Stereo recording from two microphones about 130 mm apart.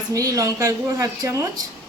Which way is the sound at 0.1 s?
25° right (ahead or behind).